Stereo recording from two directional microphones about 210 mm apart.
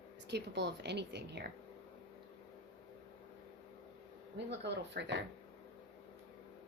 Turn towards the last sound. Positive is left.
turn(degrees=-55)  # may be behind; listen again after turning